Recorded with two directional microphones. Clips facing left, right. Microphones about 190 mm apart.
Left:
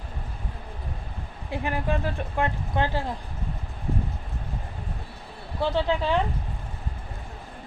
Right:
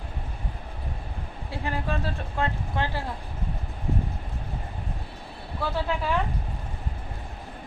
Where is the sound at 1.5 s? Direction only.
15° left (ahead or behind).